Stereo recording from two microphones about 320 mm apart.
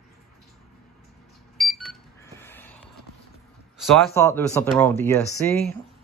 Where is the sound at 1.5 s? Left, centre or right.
Centre.